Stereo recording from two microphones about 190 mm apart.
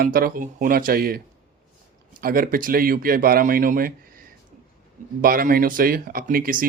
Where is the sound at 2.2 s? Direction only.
50° right (ahead or behind).